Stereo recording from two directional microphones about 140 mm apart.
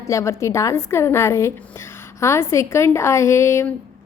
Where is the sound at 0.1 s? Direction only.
20° left (ahead or behind).